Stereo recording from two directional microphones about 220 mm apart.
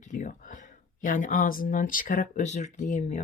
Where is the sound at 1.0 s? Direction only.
35° left (ahead or behind).